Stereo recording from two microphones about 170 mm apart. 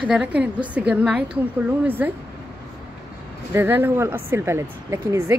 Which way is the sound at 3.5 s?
15° right (ahead or behind).